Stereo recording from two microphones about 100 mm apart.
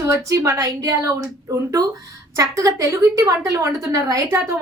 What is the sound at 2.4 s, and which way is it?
A woman's voice, 35° right (ahead or behind).